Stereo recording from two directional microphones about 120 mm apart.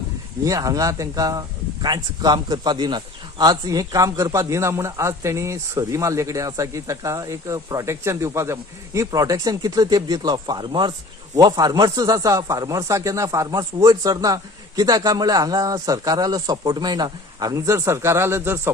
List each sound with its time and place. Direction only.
0.4 s speech: 30° right (ahead or behind)